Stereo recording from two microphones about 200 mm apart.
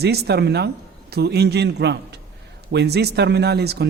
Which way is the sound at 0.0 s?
55° right (ahead or behind).